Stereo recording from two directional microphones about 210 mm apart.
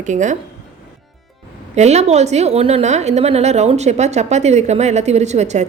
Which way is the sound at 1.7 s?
30° right (ahead or behind).